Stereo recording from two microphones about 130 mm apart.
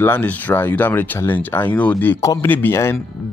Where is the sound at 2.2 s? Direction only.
25° left (ahead or behind).